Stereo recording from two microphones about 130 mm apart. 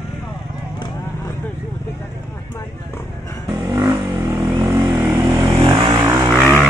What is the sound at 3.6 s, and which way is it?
Vehicle, 25° right (ahead or behind).